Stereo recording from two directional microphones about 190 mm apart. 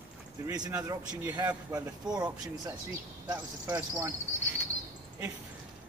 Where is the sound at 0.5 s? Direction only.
20° right (ahead or behind).